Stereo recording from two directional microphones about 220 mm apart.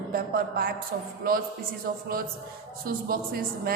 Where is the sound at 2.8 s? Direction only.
40° right (ahead or behind).